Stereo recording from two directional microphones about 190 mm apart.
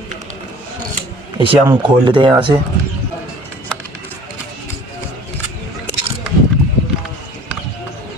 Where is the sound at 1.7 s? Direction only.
25° right (ahead or behind).